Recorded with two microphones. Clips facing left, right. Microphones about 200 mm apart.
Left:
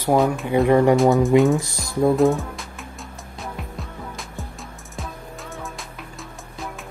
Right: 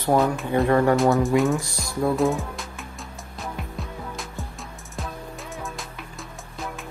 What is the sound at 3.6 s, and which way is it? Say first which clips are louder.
Music: even; centre (ahead or behind).